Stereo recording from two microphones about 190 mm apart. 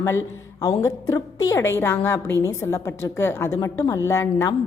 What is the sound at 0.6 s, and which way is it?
A woman's voice, 15° left (ahead or behind).